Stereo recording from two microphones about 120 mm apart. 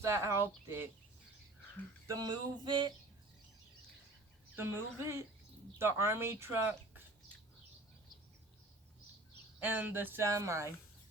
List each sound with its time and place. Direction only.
0.0 s speech: 25° right (ahead or behind)
2.0 s a sound: 35° right (ahead or behind)
4.5 s speech: 20° right (ahead or behind)
9.6 s speech: 15° right (ahead or behind)